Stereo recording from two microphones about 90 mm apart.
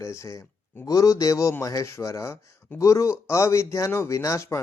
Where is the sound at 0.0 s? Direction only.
35° left (ahead or behind).